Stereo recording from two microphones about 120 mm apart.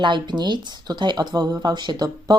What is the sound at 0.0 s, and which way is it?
Speech, 40° right (ahead or behind).